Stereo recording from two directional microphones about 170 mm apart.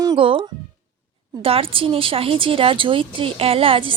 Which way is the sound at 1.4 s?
30° right (ahead or behind).